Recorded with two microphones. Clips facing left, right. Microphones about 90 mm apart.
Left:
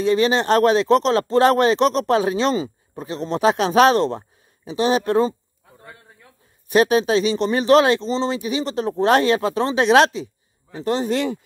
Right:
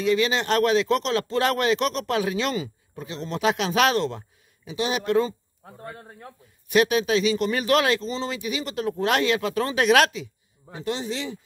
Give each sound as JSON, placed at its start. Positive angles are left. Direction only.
{"t": 0.0, "sound": "speech", "side_deg": 35}
{"t": 5.9, "sound": "a sound", "side_deg": -50}
{"t": 6.7, "sound": "speech", "side_deg": 35}